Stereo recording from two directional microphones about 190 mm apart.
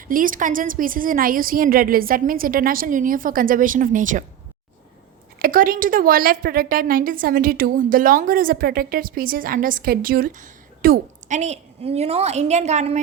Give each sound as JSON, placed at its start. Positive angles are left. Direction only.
{"t": 0.1, "sound": "a woman's voice", "side_deg": -45}
{"t": 5.4, "sound": "a woman's voice", "side_deg": -50}